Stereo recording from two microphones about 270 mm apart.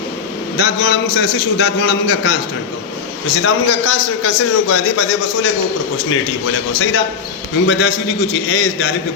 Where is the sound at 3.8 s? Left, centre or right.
Left.